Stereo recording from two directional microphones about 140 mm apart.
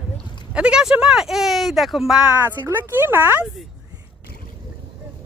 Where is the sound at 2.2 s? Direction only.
15° right (ahead or behind).